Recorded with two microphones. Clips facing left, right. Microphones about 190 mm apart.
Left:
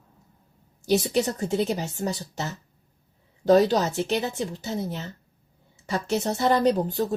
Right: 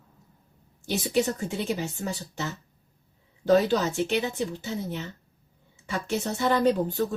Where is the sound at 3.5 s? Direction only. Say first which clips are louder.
Left 3 dB; 35° left (ahead or behind).